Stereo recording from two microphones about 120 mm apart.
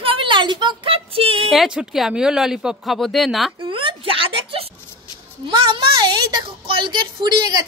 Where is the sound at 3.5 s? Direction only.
45° right (ahead or behind).